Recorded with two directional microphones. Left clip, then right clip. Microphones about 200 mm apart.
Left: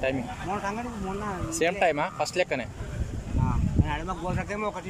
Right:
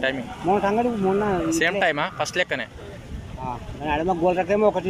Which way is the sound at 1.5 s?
10° left (ahead or behind).